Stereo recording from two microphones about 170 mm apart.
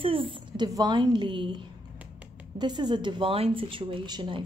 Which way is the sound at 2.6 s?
25° right (ahead or behind).